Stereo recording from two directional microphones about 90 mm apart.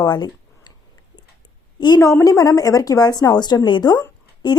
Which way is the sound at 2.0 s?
35° left (ahead or behind).